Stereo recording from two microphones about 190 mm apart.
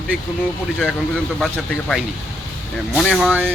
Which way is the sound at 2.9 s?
Centre (ahead or behind).